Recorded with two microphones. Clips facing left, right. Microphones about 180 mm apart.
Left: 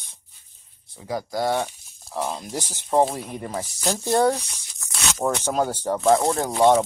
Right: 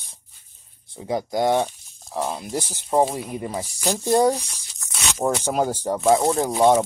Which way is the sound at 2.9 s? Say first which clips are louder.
Even; 5° right (ahead or behind).